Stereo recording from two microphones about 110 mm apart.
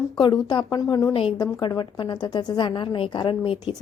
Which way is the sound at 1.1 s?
50° left (ahead or behind).